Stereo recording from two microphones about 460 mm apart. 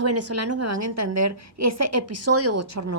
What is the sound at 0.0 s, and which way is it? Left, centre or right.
A woman's voice, right.